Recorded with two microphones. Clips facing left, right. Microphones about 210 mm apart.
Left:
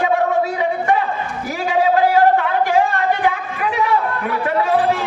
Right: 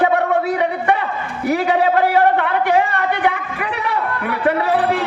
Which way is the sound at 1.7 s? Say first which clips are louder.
Left 3 dB; 65° right (ahead or behind).